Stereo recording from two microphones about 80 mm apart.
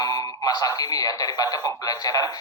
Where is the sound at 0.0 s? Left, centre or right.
Left.